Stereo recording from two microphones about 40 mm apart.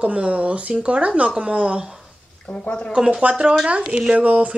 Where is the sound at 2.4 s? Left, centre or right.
Left.